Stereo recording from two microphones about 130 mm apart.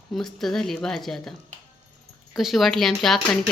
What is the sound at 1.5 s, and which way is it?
Music, 70° right (ahead or behind).